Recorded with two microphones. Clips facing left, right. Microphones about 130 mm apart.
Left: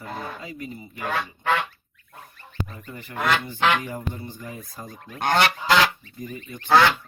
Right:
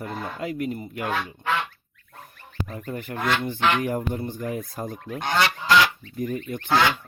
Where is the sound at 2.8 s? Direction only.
50° right (ahead or behind).